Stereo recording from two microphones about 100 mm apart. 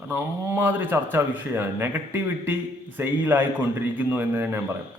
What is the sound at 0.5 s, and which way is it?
A man's voice, 20° right (ahead or behind).